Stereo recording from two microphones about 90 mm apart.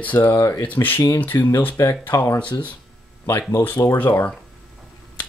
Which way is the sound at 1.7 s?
35° left (ahead or behind).